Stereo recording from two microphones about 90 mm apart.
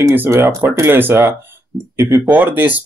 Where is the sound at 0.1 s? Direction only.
25° right (ahead or behind).